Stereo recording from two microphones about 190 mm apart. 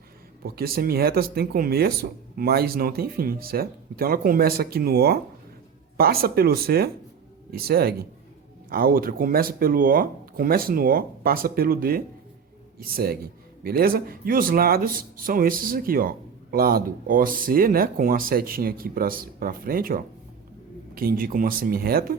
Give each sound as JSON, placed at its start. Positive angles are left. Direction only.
{"t": 0.4, "sound": "speech", "side_deg": -55}